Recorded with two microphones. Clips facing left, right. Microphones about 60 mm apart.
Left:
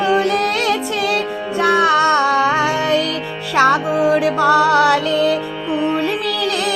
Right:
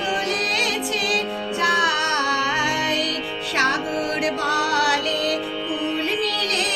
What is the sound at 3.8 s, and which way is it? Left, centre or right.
Music, left.